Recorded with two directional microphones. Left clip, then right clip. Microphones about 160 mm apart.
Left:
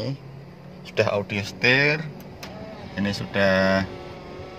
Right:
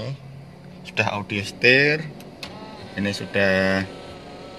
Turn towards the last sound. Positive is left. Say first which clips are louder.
# even
turn(degrees=0)  # may be behind; listen again after turning